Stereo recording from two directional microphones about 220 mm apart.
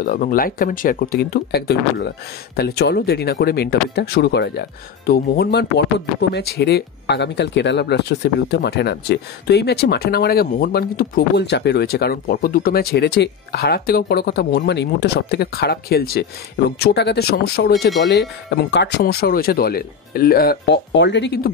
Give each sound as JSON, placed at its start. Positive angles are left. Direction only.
{"t": 0.0, "sound": "speech", "side_deg": 40}